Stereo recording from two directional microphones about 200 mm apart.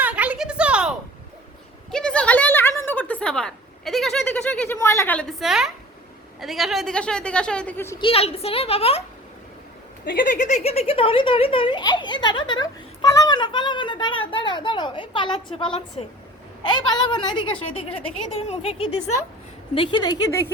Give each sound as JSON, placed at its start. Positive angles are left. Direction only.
{"t": 0.0, "sound": "a sound", "side_deg": -5}
{"t": 6.4, "sound": "speech", "side_deg": 0}
{"t": 7.9, "sound": "speech", "side_deg": 25}
{"t": 10.1, "sound": "speech", "side_deg": 40}